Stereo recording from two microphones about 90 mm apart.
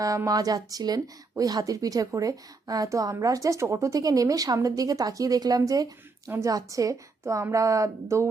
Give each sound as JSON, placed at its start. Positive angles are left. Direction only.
{"t": 0.3, "sound": "speech", "side_deg": -45}